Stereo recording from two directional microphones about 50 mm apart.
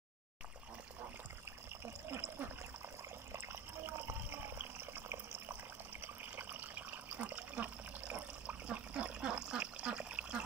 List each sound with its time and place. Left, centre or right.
3.3 s water: right